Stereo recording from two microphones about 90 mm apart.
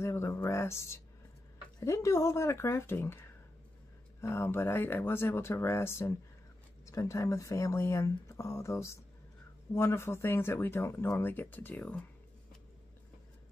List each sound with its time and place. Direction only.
0.0 s a sound: 30° left (ahead or behind)
1.9 s speech: 35° left (ahead or behind)
4.2 s speech: 30° left (ahead or behind)